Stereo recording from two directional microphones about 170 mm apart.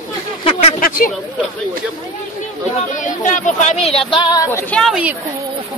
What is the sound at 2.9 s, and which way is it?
Speech, 45° left (ahead or behind).